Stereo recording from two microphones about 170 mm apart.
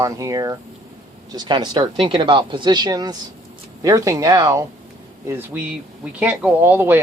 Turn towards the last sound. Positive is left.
turn(degrees=-10)  # may be behind; listen again after turning